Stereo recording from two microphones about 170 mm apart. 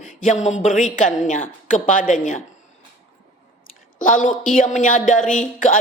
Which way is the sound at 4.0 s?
50° left (ahead or behind).